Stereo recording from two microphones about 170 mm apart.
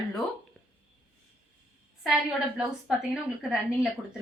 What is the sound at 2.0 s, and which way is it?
A woman's voice, 5° right (ahead or behind).